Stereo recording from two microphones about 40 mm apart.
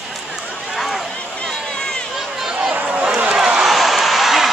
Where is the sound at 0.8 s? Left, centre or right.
Centre.